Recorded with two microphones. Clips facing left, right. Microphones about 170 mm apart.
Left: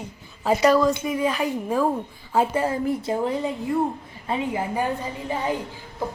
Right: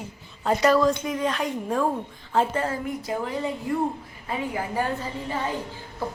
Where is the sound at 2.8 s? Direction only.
30° left (ahead or behind).